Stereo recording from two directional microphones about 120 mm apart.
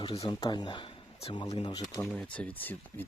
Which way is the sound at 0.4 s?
40° left (ahead or behind).